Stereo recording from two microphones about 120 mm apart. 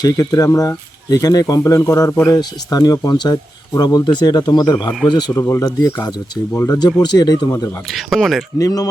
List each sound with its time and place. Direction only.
0.0 s speech: 30° left (ahead or behind)
5.3 s speech: 25° left (ahead or behind)
7.9 s speech: centre (ahead or behind)
8.5 s speech: 30° left (ahead or behind)